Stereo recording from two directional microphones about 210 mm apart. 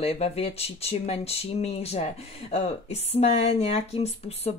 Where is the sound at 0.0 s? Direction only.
30° left (ahead or behind).